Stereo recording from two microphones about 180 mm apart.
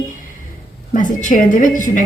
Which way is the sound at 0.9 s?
45° left (ahead or behind).